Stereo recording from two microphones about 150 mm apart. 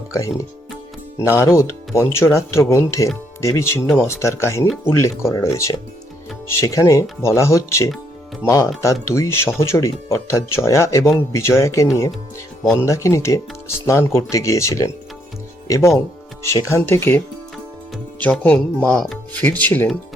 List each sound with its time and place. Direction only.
0.1 s speech: 20° left (ahead or behind)